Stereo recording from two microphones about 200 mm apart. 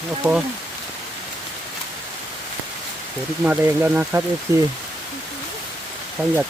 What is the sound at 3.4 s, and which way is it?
Speech, 10° right (ahead or behind).